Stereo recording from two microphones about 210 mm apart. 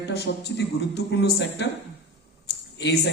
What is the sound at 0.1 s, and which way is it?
A man's voice, 55° left (ahead or behind).